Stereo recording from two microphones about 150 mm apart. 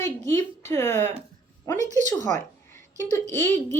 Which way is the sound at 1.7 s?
20° left (ahead or behind).